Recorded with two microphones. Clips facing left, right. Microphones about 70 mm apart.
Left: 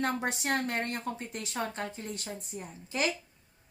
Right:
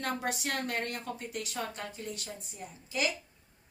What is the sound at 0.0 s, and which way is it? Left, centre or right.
A woman's voice, left.